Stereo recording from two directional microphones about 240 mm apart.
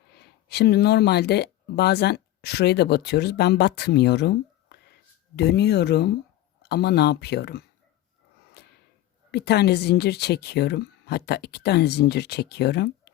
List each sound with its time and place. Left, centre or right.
0.1 s a woman's voice: left
8.6 s a sound: left
9.3 s a woman's voice: left